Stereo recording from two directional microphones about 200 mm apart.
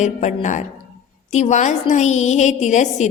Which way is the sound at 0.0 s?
35° left (ahead or behind).